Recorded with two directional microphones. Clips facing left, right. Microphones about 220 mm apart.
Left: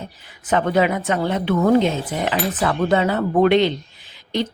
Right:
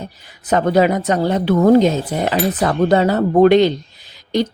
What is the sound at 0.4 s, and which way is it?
A woman's voice, 40° right (ahead or behind).